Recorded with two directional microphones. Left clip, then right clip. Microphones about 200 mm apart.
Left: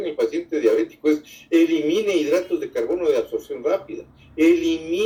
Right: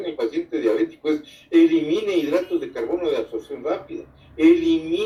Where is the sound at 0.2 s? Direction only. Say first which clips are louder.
Left 3 dB; 45° left (ahead or behind).